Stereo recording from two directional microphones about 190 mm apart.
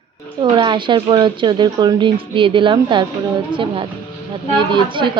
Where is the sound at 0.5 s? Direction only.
25° right (ahead or behind).